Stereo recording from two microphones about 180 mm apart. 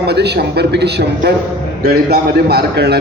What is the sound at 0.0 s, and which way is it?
A man's voice, 65° right (ahead or behind).